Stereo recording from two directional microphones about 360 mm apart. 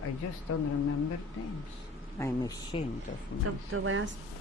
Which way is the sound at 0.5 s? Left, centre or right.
Left.